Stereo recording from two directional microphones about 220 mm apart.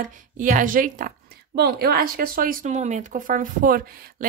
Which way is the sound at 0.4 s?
35° right (ahead or behind).